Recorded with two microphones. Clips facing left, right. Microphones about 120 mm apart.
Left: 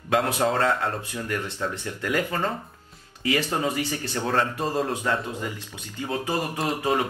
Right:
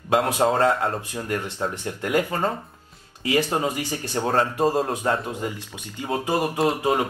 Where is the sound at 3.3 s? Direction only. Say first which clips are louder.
Right 2 dB; 15° right (ahead or behind).